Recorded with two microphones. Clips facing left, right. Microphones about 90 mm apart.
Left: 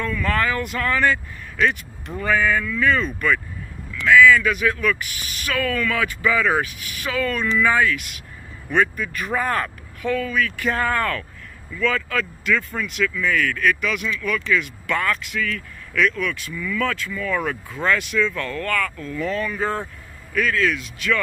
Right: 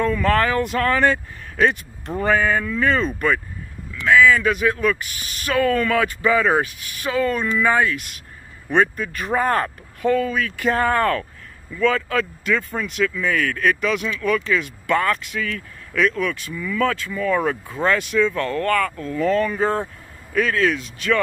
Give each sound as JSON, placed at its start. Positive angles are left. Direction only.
{"t": 0.0, "sound": "speech", "side_deg": -35}